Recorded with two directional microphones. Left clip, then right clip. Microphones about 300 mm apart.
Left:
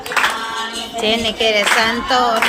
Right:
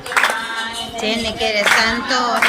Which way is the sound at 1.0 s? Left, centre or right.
Centre.